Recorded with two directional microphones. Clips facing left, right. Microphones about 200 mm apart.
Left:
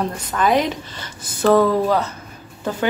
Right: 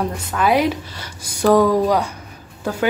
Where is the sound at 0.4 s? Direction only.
10° right (ahead or behind).